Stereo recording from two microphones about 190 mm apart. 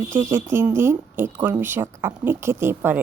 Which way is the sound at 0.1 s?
15° right (ahead or behind).